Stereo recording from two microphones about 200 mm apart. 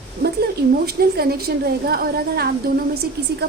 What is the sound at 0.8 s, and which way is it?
A woman's voice, 50° right (ahead or behind).